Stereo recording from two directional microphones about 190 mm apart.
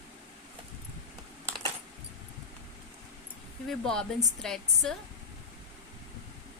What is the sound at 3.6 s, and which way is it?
A woman's voice, 5° left (ahead or behind).